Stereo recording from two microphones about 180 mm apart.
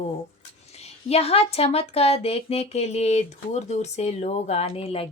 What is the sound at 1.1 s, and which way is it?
Speech, 35° left (ahead or behind).